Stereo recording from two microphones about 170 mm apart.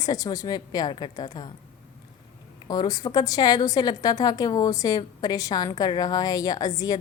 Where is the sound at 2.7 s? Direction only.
25° left (ahead or behind).